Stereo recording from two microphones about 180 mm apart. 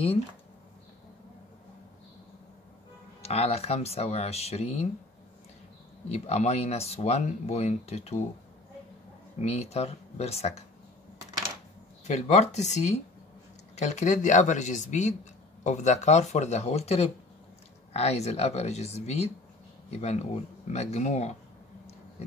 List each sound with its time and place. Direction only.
3.2 s speech: 35° left (ahead or behind)
6.0 s speech: 35° left (ahead or behind)
9.4 s speech: 35° left (ahead or behind)
12.1 s speech: 40° left (ahead or behind)